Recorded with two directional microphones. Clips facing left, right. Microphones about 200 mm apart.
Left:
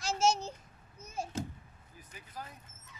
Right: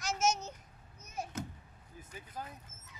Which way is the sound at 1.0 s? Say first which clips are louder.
Left 3 dB; 30° left (ahead or behind).